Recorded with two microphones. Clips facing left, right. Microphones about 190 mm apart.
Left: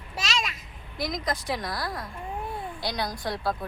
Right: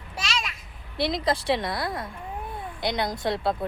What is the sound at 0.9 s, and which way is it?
A woman's voice, 30° right (ahead or behind).